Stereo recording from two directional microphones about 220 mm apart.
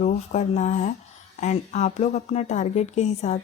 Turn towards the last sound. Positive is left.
turn(degrees=30)  # may be behind; listen again after turning